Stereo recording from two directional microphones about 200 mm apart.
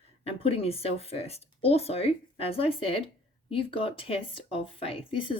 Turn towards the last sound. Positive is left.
turn(degrees=25)  # may be behind; listen again after turning